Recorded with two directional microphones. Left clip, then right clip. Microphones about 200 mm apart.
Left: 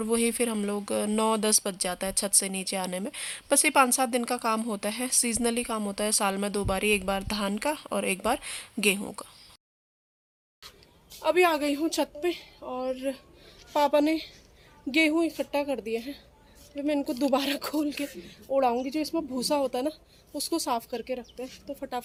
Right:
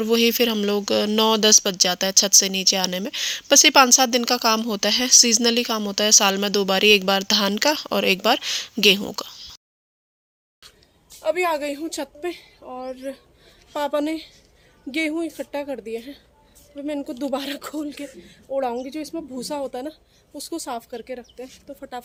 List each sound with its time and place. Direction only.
0.0 s speech: 15° right (ahead or behind)
11.2 s a woman's voice: centre (ahead or behind)